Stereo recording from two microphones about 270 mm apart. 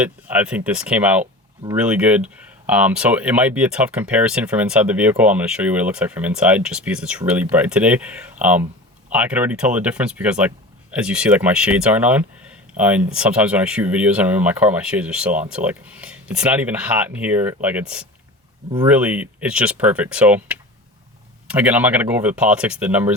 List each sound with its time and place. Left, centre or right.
0.0 s speech: centre